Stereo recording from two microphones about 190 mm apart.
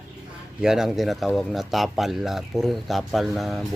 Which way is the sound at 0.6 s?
5° right (ahead or behind).